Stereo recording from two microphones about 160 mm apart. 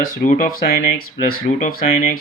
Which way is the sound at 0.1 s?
60° left (ahead or behind).